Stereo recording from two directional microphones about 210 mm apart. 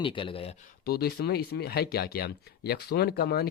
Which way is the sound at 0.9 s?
50° left (ahead or behind).